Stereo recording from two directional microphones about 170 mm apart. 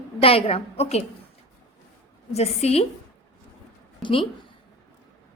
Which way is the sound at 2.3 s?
40° left (ahead or behind).